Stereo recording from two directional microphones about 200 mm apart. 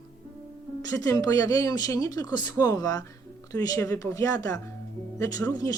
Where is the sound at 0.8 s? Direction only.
15° left (ahead or behind).